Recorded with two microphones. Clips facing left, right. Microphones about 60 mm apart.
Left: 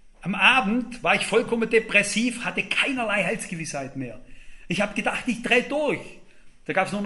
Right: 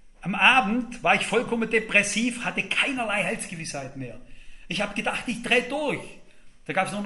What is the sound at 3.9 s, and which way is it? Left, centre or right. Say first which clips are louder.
Speech: left 4 dB; centre.